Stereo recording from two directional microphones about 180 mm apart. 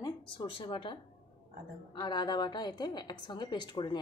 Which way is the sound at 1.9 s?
25° left (ahead or behind).